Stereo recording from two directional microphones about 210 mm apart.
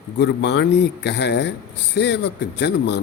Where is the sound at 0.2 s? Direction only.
55° left (ahead or behind).